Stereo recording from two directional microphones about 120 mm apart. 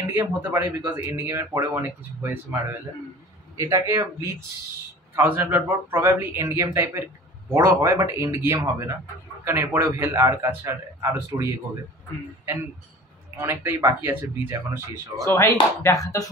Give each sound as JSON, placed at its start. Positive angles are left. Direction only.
{"t": 0.1, "sound": "a man's voice", "side_deg": -15}
{"t": 3.5, "sound": "a man's voice", "side_deg": -25}
{"t": 13.4, "sound": "a man's voice", "side_deg": -25}
{"t": 15.2, "sound": "speech", "side_deg": 25}